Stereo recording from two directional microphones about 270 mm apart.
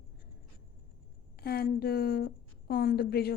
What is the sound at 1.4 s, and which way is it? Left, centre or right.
A woman's voice, left.